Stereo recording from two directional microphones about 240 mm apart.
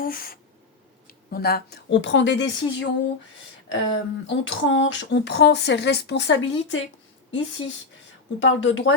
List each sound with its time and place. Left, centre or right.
0.0 s a sound: left
1.0 s speech: left
7.6 s speech: left
8.4 s speech: left